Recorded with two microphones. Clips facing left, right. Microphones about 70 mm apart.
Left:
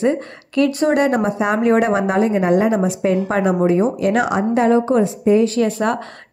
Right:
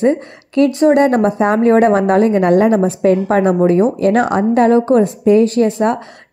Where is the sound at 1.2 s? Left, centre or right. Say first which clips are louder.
Right 5 dB; right.